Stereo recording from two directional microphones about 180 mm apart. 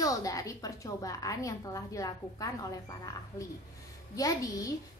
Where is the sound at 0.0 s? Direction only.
20° left (ahead or behind).